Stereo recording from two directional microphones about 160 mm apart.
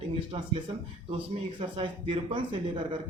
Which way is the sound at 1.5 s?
30° right (ahead or behind).